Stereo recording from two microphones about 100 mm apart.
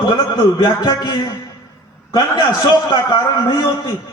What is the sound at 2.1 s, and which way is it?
A man's voice, 35° left (ahead or behind).